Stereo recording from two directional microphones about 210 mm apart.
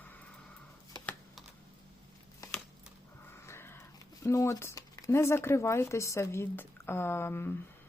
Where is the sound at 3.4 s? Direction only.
10° left (ahead or behind).